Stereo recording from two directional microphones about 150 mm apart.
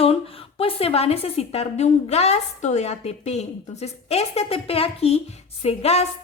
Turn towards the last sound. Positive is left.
turn(degrees=45)  # may be behind; listen again after turning